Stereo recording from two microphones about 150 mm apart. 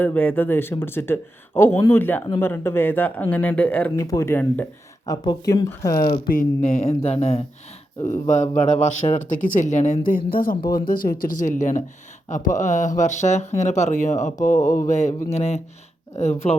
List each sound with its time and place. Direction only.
0.0 s speech: 10° left (ahead or behind)
5.0 s speech: 30° left (ahead or behind)
6.6 s speech: 50° left (ahead or behind)
10.3 s speech: 70° left (ahead or behind); by 14.3 s 55° left (ahead or behind)
14.6 s speech: 20° left (ahead or behind)
14.8 s speech: 50° left (ahead or behind)